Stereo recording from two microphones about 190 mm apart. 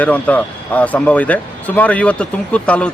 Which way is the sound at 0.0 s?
5° left (ahead or behind).